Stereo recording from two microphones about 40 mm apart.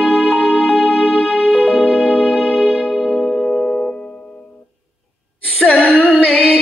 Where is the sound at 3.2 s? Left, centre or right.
Left.